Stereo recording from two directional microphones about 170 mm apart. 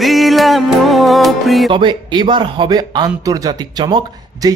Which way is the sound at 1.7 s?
25° right (ahead or behind).